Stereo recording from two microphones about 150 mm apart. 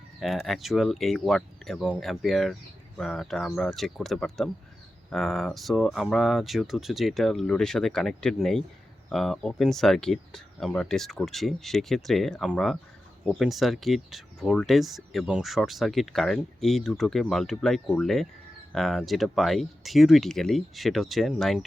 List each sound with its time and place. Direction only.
0.2 s speech: centre (ahead or behind)